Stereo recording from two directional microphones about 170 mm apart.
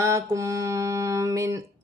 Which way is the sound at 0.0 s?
20° right (ahead or behind).